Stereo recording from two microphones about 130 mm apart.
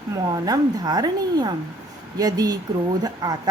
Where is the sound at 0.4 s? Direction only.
30° right (ahead or behind).